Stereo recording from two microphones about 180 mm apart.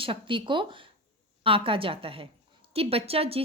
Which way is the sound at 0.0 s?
30° right (ahead or behind).